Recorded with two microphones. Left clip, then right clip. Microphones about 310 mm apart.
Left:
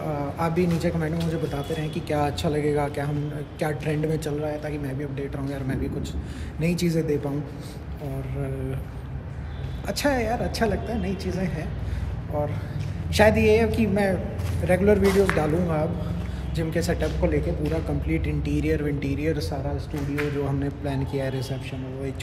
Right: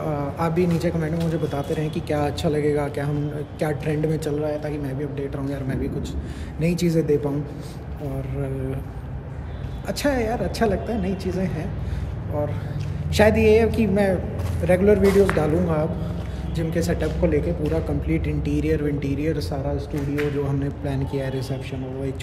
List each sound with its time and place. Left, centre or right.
0.0 s speech: centre
9.8 s speech: centre
13.1 s speech: centre